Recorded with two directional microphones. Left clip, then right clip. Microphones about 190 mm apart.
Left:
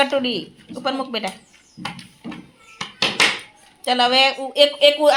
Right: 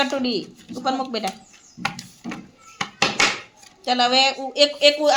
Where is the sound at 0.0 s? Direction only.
10° left (ahead or behind).